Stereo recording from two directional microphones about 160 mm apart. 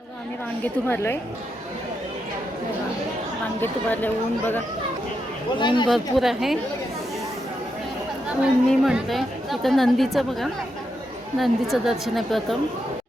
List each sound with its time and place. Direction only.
0.6 s speech: 15° left (ahead or behind)
3.6 s speech: 10° left (ahead or behind)
5.5 s speech: 30° left (ahead or behind)
5.9 s a woman's voice: centre (ahead or behind)
8.4 s a woman's voice: centre (ahead or behind)